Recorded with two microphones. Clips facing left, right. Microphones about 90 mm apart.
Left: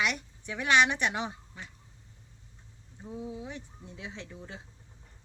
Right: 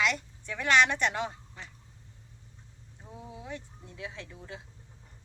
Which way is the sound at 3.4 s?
20° left (ahead or behind).